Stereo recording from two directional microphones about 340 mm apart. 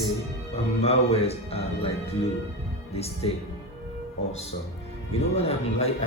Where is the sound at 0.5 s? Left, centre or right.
Centre.